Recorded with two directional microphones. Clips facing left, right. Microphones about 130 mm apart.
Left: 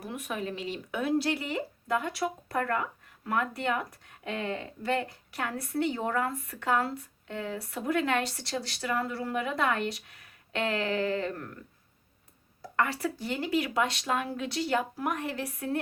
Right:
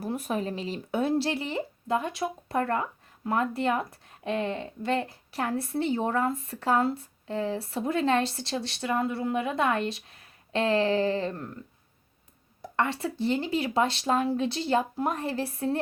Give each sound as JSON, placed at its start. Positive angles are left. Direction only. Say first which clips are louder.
{"t": 0.0, "sound": "speech", "louder": "right 5 dB", "side_deg": -35}
{"t": 12.6, "sound": "speech", "louder": "right 1 dB", "side_deg": -25}